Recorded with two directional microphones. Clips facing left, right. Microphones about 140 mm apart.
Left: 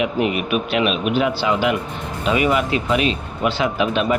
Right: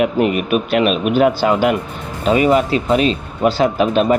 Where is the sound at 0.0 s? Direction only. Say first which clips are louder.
Right 4 dB; 45° right (ahead or behind).